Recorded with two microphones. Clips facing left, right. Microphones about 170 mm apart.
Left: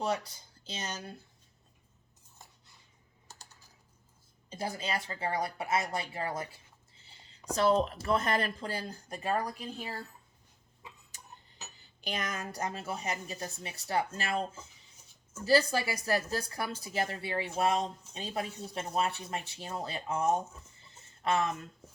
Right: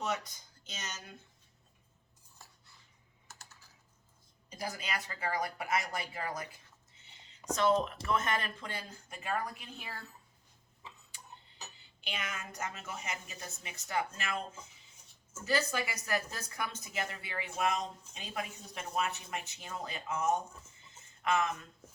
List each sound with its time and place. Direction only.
0.0 s speech: 30° left (ahead or behind)
2.4 s cutlery: 20° left (ahead or behind)
3.2 s typing: 15° left (ahead or behind)
4.4 s speech: 30° left (ahead or behind)
11.1 s tick-tock: 40° left (ahead or behind)
11.8 s speech: 40° left (ahead or behind)
15.4 s speech: 35° left (ahead or behind)